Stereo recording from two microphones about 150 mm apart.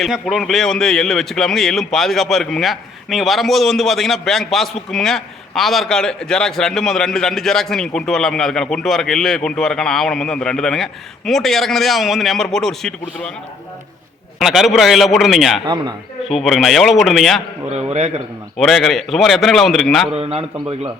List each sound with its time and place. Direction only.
0.0 s a man's voice: centre (ahead or behind)
14.3 s a man's voice: centre (ahead or behind)
15.6 s speech: 30° right (ahead or behind)
16.3 s a man's voice: centre (ahead or behind)
18.5 s a man's voice: centre (ahead or behind)
20.1 s a man's voice: 40° right (ahead or behind)